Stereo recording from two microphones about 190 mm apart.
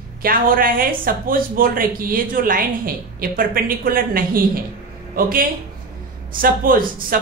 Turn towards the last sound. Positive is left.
turn(degrees=-45)  # may be behind; listen again after turning